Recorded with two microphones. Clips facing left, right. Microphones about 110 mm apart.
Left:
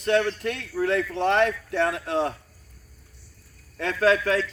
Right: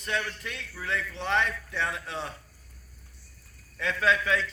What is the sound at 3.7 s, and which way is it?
Speech, 50° left (ahead or behind).